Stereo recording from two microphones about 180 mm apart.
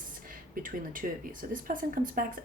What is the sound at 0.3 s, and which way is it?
Speech, 50° right (ahead or behind).